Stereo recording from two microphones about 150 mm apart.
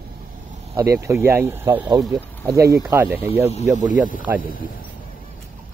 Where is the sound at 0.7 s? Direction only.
20° right (ahead or behind).